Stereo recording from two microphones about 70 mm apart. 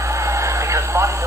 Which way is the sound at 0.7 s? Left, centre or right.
Right.